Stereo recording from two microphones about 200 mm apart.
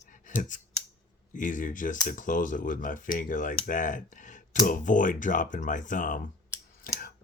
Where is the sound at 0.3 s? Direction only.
40° left (ahead or behind).